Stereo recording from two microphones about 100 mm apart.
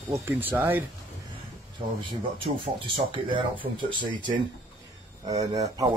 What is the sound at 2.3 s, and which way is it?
Speech, 60° right (ahead or behind).